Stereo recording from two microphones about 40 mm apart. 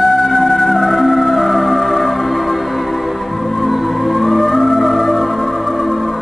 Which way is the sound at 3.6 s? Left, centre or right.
Centre.